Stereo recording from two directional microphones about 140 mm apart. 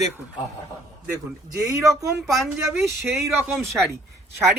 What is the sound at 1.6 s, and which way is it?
Speech, 25° right (ahead or behind).